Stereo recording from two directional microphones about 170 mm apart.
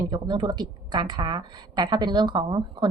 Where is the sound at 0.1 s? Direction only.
25° right (ahead or behind).